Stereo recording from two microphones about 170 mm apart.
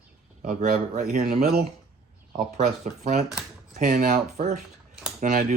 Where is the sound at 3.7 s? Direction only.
60° right (ahead or behind).